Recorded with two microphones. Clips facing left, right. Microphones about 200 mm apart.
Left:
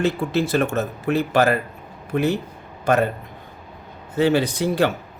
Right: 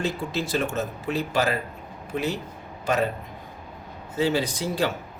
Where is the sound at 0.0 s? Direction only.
60° left (ahead or behind).